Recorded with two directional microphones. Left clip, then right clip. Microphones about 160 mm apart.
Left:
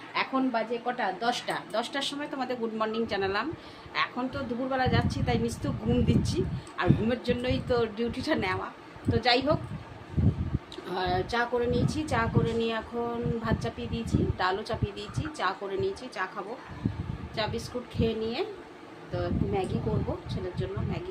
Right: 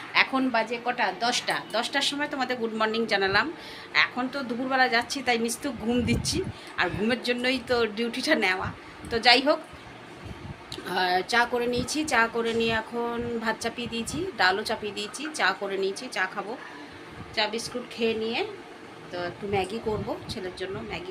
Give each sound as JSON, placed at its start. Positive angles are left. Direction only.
{"t": 0.1, "sound": "a sound", "side_deg": 0}
{"t": 0.6, "sound": "a woman's voice", "side_deg": 15}
{"t": 10.8, "sound": "a woman's voice", "side_deg": 0}
{"t": 17.3, "sound": "a woman's voice", "side_deg": 15}
{"t": 20.3, "sound": "a woman's voice", "side_deg": 5}